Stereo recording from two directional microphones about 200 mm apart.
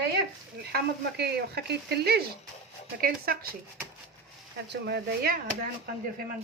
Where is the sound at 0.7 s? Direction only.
55° right (ahead or behind).